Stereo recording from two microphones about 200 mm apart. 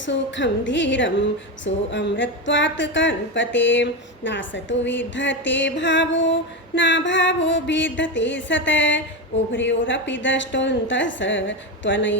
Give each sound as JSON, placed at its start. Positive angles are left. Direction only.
{"t": 0.0, "sound": "female singing", "side_deg": 65}
{"t": 9.5, "sound": "a woman's voice", "side_deg": 70}